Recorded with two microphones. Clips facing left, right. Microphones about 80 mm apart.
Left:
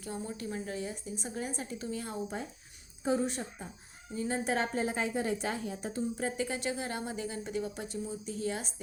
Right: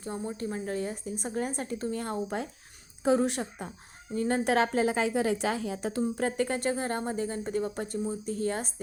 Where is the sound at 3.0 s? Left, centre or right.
Right.